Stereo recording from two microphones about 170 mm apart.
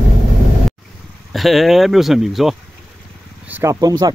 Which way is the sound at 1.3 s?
Centre (ahead or behind).